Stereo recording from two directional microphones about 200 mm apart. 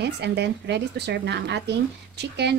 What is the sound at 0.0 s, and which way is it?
Speech, 55° right (ahead or behind).